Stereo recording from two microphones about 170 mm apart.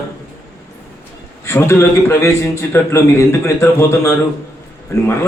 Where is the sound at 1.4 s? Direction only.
15° left (ahead or behind).